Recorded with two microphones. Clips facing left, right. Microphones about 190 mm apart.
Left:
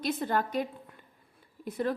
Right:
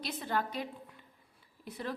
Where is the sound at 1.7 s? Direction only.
50° left (ahead or behind).